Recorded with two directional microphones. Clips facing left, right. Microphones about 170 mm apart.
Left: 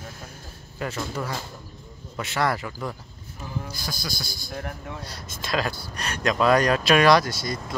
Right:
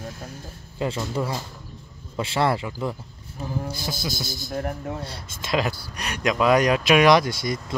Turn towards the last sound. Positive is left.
turn(degrees=-20)  # may be behind; listen again after turning